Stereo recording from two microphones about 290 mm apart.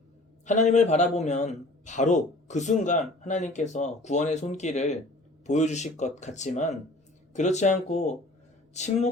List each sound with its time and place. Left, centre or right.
0.4 s a man's voice: left